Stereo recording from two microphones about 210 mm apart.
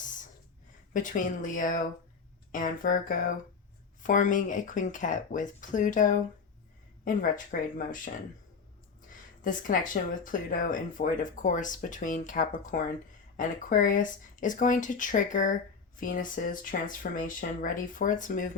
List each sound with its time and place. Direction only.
0.0 s a sound: 40° left (ahead or behind)
0.9 s speech: 40° left (ahead or behind)
9.4 s speech: 40° left (ahead or behind)